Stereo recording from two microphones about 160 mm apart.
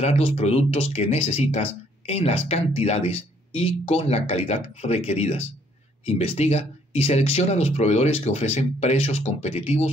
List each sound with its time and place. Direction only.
0.0 s speech: 40° left (ahead or behind)